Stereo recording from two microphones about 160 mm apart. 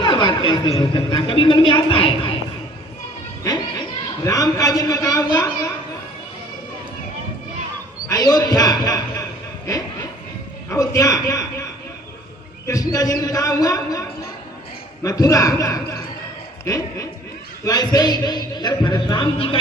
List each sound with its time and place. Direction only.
0.0 s a woman's voice: 30° left (ahead or behind)
3.4 s a man's voice: 20° left (ahead or behind)
8.0 s a man's voice: 20° left (ahead or behind)